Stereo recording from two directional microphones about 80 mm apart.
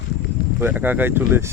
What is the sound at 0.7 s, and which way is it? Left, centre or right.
Speech, right.